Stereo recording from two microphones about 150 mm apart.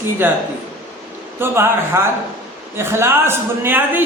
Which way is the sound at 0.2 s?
15° right (ahead or behind).